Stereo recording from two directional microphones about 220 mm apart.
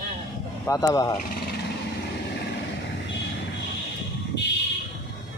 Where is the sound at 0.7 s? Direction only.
15° left (ahead or behind).